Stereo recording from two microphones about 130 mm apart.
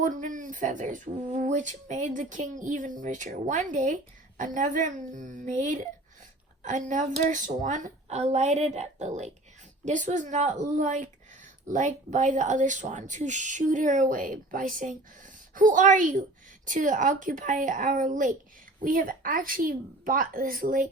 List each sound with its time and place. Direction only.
0.0 s a woman's voice: 80° right